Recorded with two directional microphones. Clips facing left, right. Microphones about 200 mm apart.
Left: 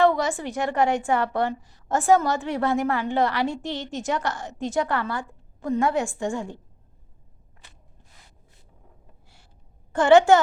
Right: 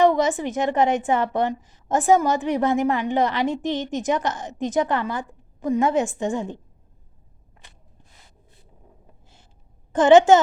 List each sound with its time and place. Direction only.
0.0 s a woman's voice: 20° right (ahead or behind)
9.9 s a woman's voice: 20° right (ahead or behind)